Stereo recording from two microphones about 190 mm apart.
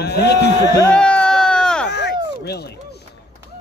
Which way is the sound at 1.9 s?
65° left (ahead or behind).